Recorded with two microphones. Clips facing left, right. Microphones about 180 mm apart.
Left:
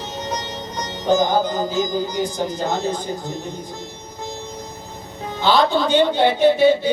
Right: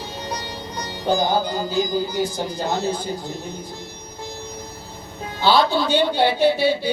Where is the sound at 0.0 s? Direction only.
20° left (ahead or behind).